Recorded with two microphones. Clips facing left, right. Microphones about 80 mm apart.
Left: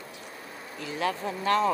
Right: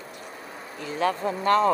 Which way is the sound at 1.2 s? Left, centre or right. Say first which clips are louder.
Right 4 dB; right.